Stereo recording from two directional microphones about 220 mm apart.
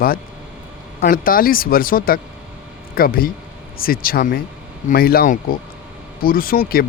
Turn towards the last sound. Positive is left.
turn(degrees=40)  # may be behind; listen again after turning